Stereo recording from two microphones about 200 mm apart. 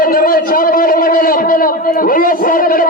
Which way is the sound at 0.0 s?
45° left (ahead or behind).